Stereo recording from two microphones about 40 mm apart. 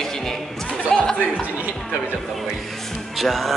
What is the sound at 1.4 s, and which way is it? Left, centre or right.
Speech, right.